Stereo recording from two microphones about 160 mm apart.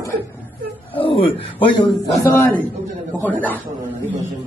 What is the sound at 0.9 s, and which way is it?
Speech, 35° left (ahead or behind).